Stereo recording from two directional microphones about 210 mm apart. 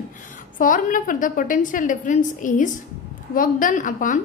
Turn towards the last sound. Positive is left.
turn(degrees=40)  # may be behind; listen again after turning